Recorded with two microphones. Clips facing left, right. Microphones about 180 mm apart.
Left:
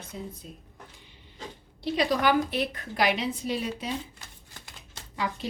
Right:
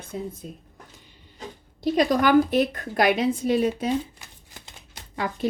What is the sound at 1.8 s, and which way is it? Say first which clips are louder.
A woman's voice: right 5 dB; 45° right (ahead or behind).